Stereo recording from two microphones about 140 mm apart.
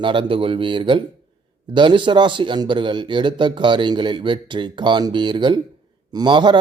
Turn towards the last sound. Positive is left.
turn(degrees=-35)  # may be behind; listen again after turning